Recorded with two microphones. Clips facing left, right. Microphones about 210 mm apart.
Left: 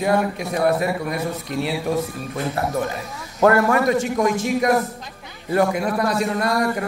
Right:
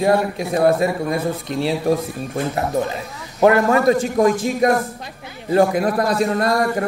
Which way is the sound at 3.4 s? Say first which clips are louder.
Right 2 dB; 20° right (ahead or behind).